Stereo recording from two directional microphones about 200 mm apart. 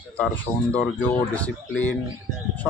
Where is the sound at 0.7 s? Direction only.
5° left (ahead or behind).